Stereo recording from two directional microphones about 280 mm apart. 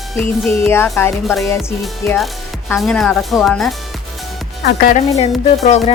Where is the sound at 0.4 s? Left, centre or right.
Centre.